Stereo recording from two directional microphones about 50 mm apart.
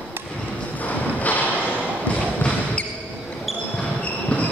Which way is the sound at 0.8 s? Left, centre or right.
Left.